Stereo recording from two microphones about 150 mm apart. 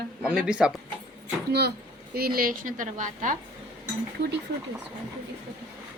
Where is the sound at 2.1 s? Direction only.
85° right; by 3.3 s 60° right (ahead or behind).